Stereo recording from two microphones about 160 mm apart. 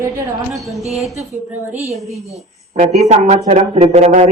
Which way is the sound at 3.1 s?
45° right (ahead or behind).